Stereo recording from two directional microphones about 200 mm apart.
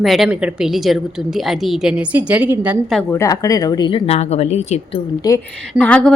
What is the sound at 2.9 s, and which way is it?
A woman's voice, 15° left (ahead or behind).